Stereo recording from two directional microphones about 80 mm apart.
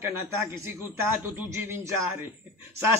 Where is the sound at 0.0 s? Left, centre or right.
Right.